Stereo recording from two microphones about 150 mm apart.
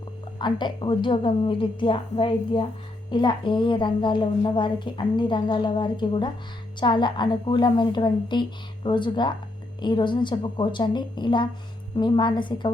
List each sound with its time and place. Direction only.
0.3 s a woman's voice: 30° left (ahead or behind)